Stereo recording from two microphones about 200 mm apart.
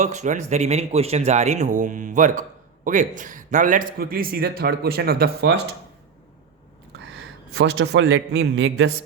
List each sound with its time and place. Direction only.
0.0 s speech: 35° right (ahead or behind); by 5.5 s 50° right (ahead or behind)
7.5 s a man's voice: 70° right (ahead or behind); by 8.9 s 85° right